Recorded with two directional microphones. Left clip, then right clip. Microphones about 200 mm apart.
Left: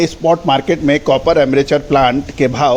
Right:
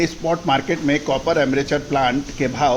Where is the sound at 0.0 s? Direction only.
35° left (ahead or behind).